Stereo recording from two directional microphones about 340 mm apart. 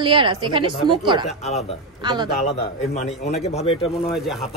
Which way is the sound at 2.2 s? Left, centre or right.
Centre.